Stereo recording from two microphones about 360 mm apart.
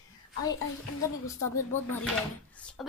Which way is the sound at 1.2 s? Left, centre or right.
Centre.